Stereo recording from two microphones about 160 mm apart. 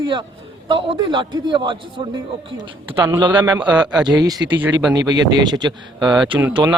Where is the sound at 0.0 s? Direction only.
30° right (ahead or behind).